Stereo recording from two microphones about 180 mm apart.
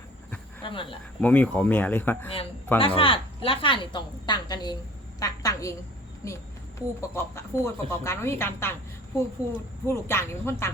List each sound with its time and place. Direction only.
0.6 s speech: 30° left (ahead or behind)
1.2 s speech: 10° left (ahead or behind)
2.7 s a woman's voice: 30° left (ahead or behind); by 8.7 s 15° left (ahead or behind)
9.8 s speech: 15° left (ahead or behind)